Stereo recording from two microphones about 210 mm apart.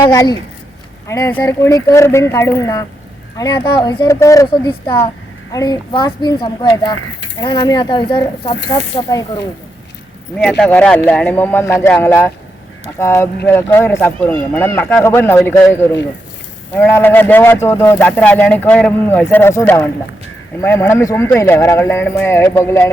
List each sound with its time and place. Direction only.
0.0 s a woman's voice: 15° left (ahead or behind)
10.6 s speech: 5° left (ahead or behind)